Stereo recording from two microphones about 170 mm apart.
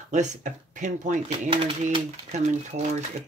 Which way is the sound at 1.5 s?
30° right (ahead or behind).